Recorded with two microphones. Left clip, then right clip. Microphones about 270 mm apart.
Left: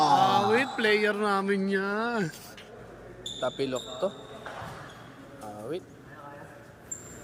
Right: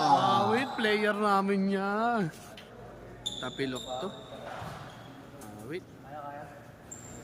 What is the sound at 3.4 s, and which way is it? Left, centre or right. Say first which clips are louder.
Speech: left 7 dB; centre.